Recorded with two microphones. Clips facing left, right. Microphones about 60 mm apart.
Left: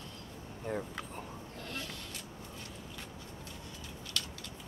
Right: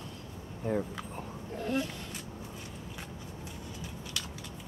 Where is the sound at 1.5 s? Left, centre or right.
Centre.